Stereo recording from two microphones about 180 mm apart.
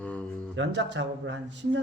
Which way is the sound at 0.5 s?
90° right.